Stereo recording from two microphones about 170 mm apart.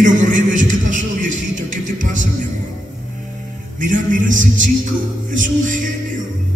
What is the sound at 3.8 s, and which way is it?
A man's voice, 50° right (ahead or behind).